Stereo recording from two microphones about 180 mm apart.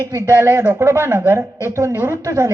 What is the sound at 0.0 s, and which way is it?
A woman's voice, 20° right (ahead or behind).